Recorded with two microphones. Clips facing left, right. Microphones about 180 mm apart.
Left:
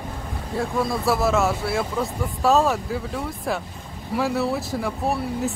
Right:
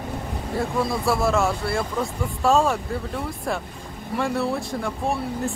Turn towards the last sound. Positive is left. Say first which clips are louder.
# left 1 dB
turn(degrees=5)  # may be behind; listen again after turning